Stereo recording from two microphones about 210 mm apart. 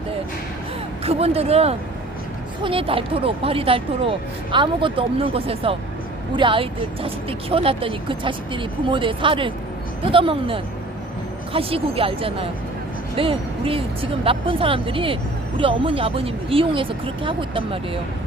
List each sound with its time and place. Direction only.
1.0 s speech: 30° right (ahead or behind)